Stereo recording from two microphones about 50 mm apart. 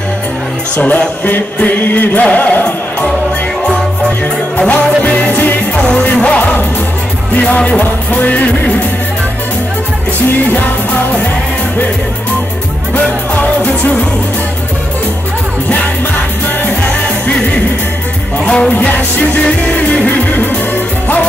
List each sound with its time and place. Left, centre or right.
0.7 s music: left
4.6 s music: left
5.8 s music: left
7.3 s speech: left
7.8 s music: left
13.4 s music: left
18.4 s music: left
18.7 s music: left